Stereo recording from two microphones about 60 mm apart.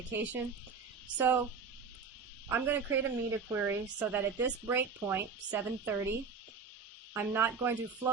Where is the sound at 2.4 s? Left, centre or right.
Right.